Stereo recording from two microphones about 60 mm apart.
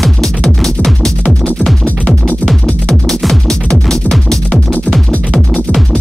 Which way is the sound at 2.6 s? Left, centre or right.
Centre.